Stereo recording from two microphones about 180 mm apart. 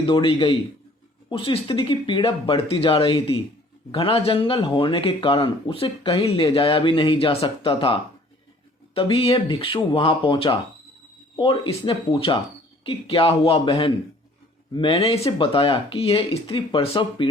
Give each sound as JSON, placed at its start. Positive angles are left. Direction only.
{"t": 0.0, "sound": "speech", "side_deg": 30}
{"t": 9.0, "sound": "speech", "side_deg": 30}